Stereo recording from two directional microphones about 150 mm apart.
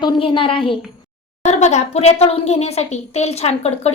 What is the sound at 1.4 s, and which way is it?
Speech, 50° left (ahead or behind).